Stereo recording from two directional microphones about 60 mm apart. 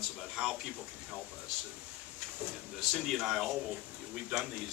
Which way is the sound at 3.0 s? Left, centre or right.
Centre.